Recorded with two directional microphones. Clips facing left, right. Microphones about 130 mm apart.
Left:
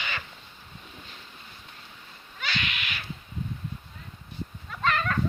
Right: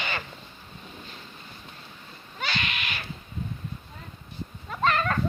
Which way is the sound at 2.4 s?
35° right (ahead or behind).